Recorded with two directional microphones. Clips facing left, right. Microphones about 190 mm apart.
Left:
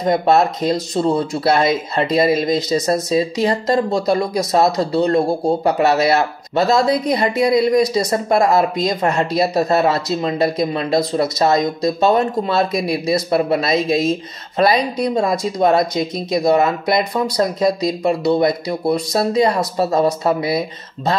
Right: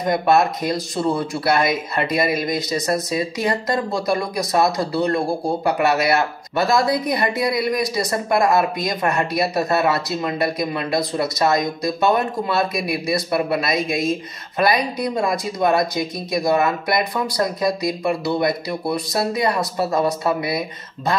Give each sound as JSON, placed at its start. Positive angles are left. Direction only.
{"t": 0.0, "sound": "speech", "side_deg": 25}